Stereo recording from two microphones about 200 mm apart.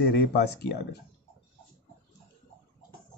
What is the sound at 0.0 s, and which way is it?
Speech, 55° left (ahead or behind).